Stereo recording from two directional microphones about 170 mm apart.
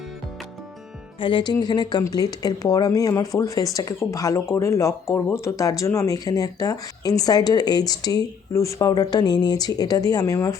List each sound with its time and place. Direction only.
1.2 s speech: 30° left (ahead or behind)